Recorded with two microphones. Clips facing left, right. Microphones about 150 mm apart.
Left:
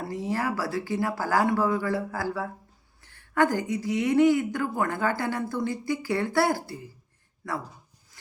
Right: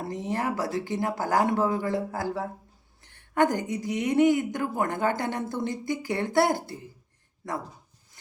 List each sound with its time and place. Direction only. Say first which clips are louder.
0.0 s speech: even; 20° right (ahead or behind)